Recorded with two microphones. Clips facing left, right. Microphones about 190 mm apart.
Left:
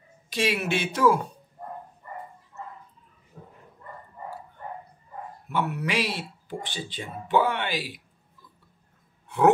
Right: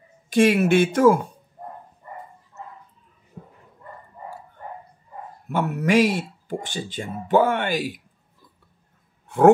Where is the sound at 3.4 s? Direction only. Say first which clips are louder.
Right 4 dB; 20° right (ahead or behind).